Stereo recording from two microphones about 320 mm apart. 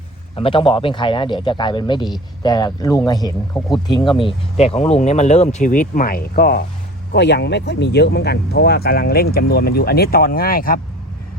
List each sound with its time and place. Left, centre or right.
0.3 s speech: centre